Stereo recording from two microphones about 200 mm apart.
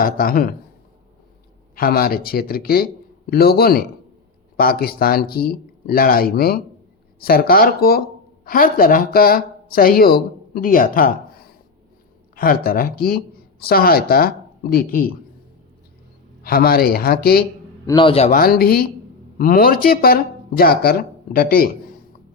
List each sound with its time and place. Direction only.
0.0 s speech: 45° left (ahead or behind)
1.7 s speech: 50° left (ahead or behind)
16.4 s speech: 50° left (ahead or behind)
17.8 s a man's voice: 25° left (ahead or behind)
18.3 s speech: 45° left (ahead or behind)